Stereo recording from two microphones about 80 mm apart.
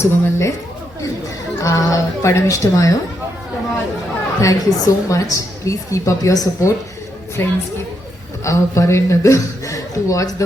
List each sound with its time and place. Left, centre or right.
0.0 s a man's voice: left
1.6 s a man's voice: left
4.4 s a woman's voice: left
7.4 s a man's voice: left
8.4 s a man's voice: left